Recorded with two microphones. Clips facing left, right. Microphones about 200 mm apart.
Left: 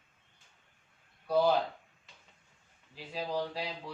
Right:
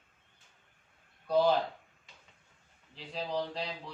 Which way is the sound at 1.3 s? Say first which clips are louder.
Right 1 dB; 10° left (ahead or behind).